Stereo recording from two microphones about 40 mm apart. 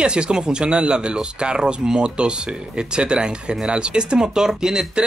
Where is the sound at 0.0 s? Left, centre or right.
Right.